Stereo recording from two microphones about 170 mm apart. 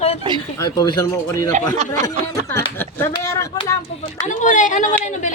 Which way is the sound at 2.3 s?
15° left (ahead or behind).